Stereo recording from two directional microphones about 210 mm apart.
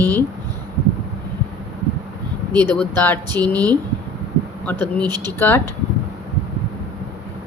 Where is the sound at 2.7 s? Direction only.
10° left (ahead or behind).